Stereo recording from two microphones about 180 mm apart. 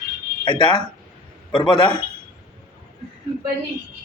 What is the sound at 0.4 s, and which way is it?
Speech, 25° left (ahead or behind).